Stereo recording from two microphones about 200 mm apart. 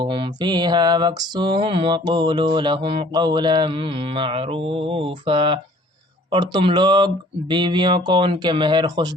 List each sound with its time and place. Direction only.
0.0 s mantra: 25° right (ahead or behind)